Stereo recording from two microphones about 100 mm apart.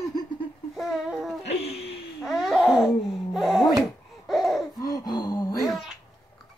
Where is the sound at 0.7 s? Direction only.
5° right (ahead or behind).